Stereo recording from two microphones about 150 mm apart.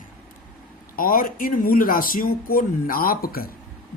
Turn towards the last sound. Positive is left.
turn(degrees=80)